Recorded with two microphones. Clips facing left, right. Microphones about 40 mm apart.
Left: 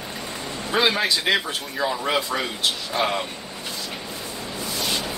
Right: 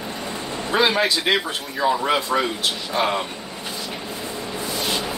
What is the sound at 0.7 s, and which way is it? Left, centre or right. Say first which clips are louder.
Speech: right 2 dB; centre.